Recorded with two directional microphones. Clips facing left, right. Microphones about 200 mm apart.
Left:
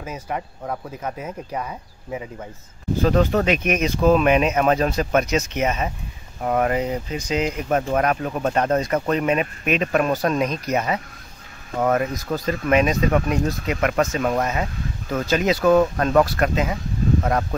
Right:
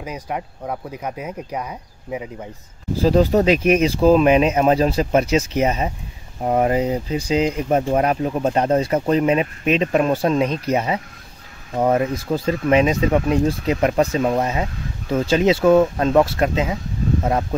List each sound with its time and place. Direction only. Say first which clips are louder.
0.0 s speech: right 1 dB; 10° right (ahead or behind)
3.0 s speech: right 3 dB; 35° right (ahead or behind); by 17.6 s 15° right (ahead or behind)